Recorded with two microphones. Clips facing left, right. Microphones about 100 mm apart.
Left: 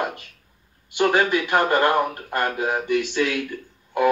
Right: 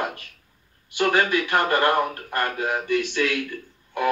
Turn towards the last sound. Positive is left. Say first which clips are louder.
# left 5 dB
turn(degrees=15)  # may be behind; listen again after turning